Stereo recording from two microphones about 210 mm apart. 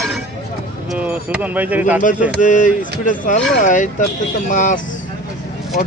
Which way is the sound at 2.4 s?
40° left (ahead or behind).